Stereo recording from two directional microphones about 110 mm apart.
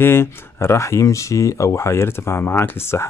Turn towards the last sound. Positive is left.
turn(degrees=25)  # may be behind; listen again after turning